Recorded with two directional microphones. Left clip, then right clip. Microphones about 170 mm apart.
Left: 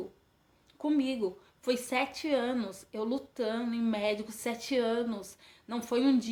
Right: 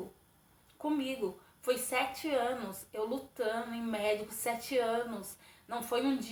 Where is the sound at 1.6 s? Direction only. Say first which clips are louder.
Left 1 dB; 30° left (ahead or behind).